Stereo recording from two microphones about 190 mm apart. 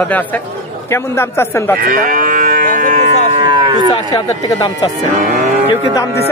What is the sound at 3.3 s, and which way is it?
Cattle, 25° right (ahead or behind).